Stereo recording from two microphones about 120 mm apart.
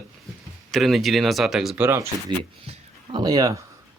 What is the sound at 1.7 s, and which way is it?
Speech, 20° right (ahead or behind).